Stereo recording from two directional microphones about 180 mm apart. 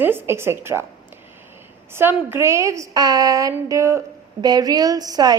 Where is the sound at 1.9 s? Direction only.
10° right (ahead or behind).